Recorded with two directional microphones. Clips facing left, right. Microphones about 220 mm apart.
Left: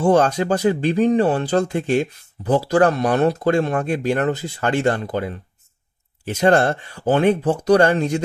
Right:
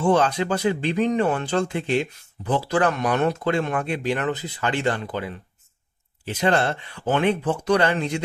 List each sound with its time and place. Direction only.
0.0 s speech: 45° left (ahead or behind)